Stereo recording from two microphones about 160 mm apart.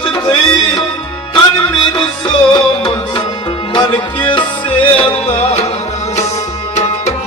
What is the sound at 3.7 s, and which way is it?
Music, 30° left (ahead or behind).